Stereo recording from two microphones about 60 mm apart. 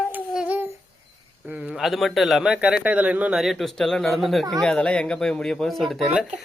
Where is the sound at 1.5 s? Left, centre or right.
Centre.